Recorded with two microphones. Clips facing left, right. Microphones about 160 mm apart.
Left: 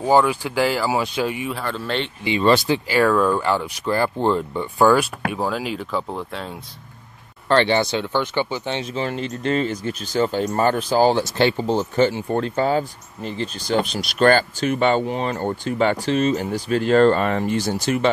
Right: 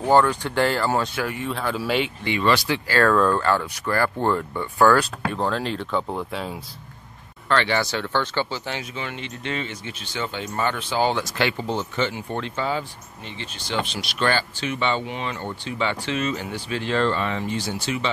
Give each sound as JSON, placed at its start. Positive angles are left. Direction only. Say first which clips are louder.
{"t": 0.0, "sound": "speech", "louder": "left 1 dB", "side_deg": 10}
{"t": 1.5, "sound": "speech", "louder": "right 1 dB", "side_deg": 0}
{"t": 2.2, "sound": "speech", "louder": "left 7 dB", "side_deg": 25}
{"t": 7.4, "sound": "speech", "louder": "left 5 dB", "side_deg": 30}
{"t": 8.9, "sound": "speech", "louder": "left 7 dB", "side_deg": 35}